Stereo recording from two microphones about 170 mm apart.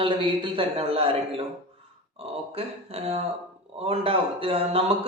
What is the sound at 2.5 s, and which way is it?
A man's voice, 35° right (ahead or behind).